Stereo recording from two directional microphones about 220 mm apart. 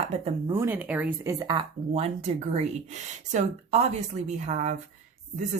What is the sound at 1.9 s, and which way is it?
Speech, 30° right (ahead or behind).